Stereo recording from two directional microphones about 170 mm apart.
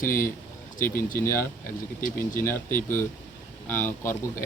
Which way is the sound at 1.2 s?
15° left (ahead or behind).